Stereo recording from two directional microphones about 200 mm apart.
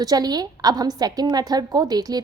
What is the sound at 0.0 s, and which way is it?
A woman's voice, 20° right (ahead or behind).